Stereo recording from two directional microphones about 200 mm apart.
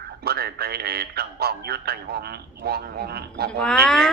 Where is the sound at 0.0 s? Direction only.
50° right (ahead or behind).